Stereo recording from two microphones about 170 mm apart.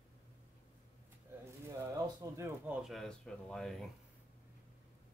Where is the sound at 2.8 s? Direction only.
Centre (ahead or behind).